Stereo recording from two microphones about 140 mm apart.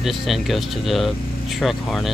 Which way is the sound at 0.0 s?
Centre (ahead or behind).